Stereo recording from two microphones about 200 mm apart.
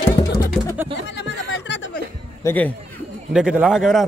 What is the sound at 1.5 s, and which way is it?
Chuckle, 60° left (ahead or behind).